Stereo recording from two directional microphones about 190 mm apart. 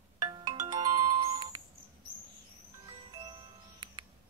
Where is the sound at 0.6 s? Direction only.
20° right (ahead or behind).